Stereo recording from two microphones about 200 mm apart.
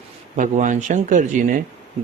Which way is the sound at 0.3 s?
40° right (ahead or behind).